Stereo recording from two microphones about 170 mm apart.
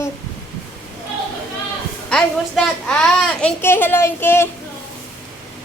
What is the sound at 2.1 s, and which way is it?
A woman's voice, 5° left (ahead or behind).